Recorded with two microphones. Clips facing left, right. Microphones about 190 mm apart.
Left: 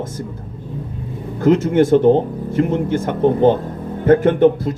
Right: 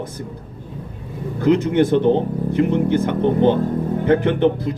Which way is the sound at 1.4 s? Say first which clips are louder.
Left 2 dB; 45° left (ahead or behind).